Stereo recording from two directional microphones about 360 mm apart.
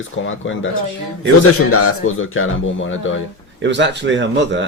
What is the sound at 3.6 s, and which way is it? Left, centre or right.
Speech, right.